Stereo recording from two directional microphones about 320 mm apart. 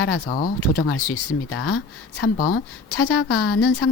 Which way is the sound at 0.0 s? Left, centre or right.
Left.